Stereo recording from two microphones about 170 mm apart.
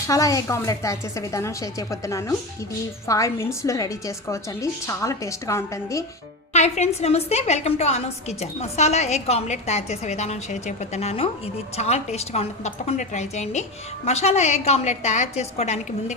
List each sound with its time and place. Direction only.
0.1 s a woman's voice: 20° left (ahead or behind)
6.5 s a woman's voice: 40° left (ahead or behind)